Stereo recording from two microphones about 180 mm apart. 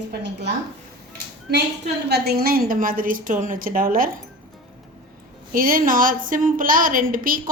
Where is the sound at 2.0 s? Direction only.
65° right (ahead or behind).